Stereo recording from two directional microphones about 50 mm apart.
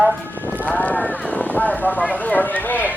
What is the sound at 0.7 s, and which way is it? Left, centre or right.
Speech, left.